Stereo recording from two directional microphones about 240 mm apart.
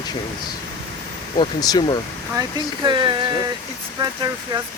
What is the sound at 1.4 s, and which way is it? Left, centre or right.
Speech, centre.